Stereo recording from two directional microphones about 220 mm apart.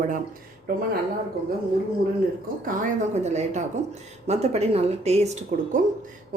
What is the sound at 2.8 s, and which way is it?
A woman's voice, 30° right (ahead or behind).